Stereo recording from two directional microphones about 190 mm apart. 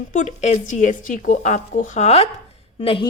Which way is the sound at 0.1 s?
40° left (ahead or behind).